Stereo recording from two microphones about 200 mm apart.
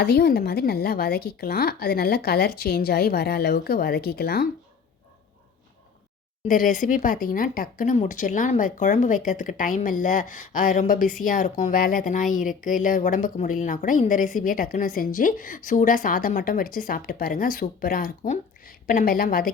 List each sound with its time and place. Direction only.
0.0 s speech: 50° left (ahead or behind)
6.5 s speech: 40° left (ahead or behind)